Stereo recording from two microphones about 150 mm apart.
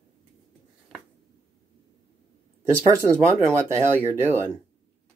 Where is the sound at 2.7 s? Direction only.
20° right (ahead or behind).